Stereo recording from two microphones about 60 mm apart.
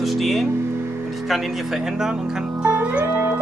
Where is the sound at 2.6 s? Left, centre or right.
Right.